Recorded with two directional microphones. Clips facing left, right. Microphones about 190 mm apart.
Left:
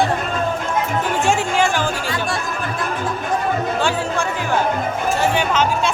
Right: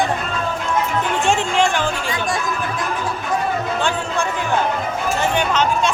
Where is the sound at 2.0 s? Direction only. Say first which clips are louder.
Even; 20° right (ahead or behind).